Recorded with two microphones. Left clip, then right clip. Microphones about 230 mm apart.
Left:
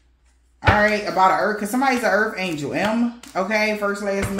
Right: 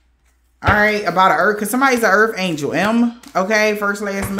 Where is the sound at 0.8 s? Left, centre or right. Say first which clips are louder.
Right 4 dB; right.